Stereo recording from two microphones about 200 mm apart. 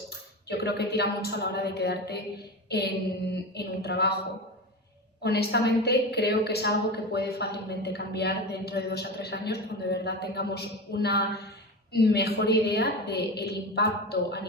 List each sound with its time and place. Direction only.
0.4 s a woman's voice: 55° left (ahead or behind)
2.6 s mantra: 55° left (ahead or behind)
3.5 s a woman's voice: 55° left (ahead or behind)
5.2 s a woman's voice: 55° left (ahead or behind)